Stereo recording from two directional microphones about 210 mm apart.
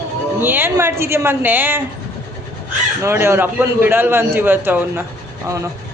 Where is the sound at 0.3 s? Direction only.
10° right (ahead or behind).